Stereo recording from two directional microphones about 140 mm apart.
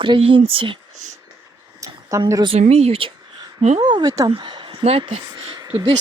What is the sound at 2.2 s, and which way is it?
Speech, 35° right (ahead or behind).